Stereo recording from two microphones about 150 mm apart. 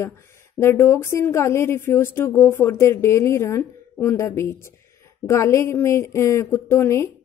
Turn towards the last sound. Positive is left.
turn(degrees=15)  # may be behind; listen again after turning